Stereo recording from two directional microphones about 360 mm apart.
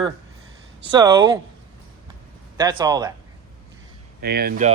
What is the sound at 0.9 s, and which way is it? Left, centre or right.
Speech, centre.